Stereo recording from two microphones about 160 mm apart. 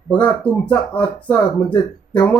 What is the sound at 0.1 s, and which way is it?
Speech, 10° left (ahead or behind).